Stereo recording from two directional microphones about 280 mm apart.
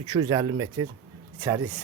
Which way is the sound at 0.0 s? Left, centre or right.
Centre.